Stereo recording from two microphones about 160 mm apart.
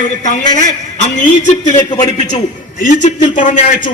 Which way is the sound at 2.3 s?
50° left (ahead or behind).